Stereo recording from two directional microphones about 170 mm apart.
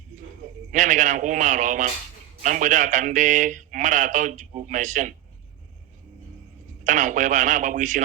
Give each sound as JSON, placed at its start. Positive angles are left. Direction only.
{"t": 0.7, "sound": "a man's voice", "side_deg": -50}
{"t": 6.8, "sound": "a man's voice", "side_deg": -50}